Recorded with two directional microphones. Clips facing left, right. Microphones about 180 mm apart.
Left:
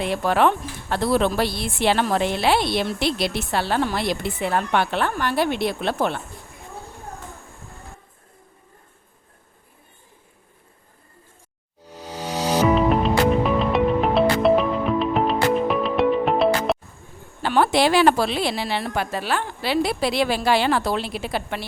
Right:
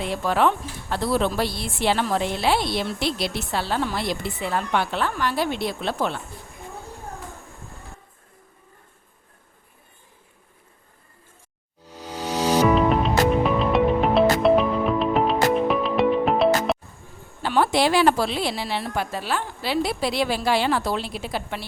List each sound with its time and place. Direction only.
0.0 s a woman's voice: 65° left (ahead or behind)
12.6 s music: centre (ahead or behind)
17.4 s a woman's voice: 65° left (ahead or behind)